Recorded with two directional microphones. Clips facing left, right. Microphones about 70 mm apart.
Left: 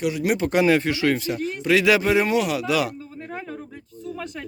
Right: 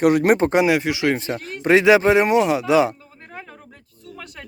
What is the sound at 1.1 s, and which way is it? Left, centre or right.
Speech, right.